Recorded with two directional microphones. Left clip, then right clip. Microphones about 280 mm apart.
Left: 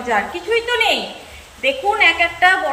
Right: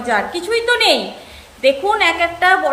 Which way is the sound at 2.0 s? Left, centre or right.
Right.